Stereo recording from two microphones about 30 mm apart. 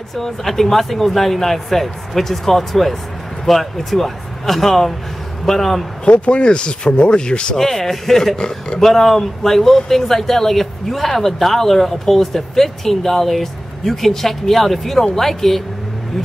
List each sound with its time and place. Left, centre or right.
0.1 s speech: centre
6.0 s speech: left
7.5 s speech: centre
8.4 s a man's voice: left
8.7 s speech: centre